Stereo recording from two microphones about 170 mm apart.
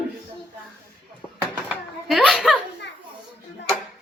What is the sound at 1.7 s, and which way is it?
Children playing, centre (ahead or behind).